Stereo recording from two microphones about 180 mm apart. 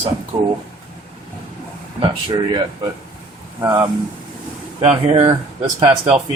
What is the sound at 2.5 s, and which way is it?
Speech, 25° right (ahead or behind).